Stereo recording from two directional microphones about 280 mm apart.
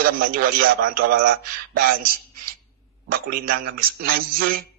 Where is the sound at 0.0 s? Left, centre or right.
Right.